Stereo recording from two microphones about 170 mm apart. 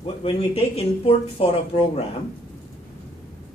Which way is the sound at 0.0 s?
35° left (ahead or behind).